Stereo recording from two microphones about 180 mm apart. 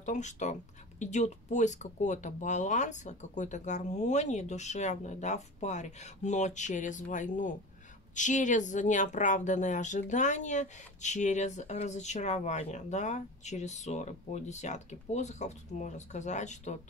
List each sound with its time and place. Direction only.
0.0 s speech: 40° left (ahead or behind)